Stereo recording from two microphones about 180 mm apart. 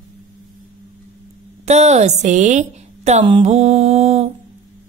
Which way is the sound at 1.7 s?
40° right (ahead or behind).